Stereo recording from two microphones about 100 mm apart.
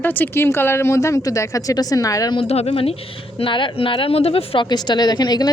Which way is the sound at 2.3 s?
80° left.